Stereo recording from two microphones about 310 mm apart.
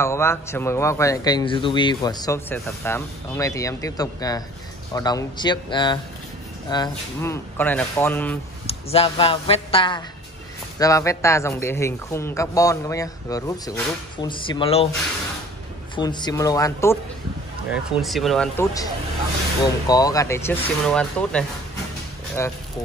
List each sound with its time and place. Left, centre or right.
0.0 s a man's voice: centre
8.6 s a man's voice: centre
16.0 s a man's voice: centre
19.9 s a man's voice: centre